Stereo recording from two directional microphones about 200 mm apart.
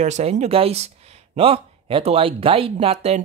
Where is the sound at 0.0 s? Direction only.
35° right (ahead or behind).